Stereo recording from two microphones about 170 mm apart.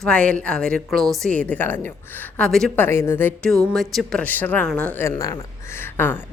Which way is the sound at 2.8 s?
15° left (ahead or behind).